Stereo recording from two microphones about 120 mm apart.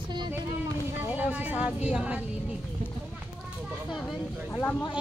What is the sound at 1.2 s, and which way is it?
Speech, 15° right (ahead or behind).